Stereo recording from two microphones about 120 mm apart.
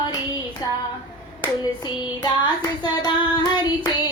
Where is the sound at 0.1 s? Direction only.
35° left (ahead or behind).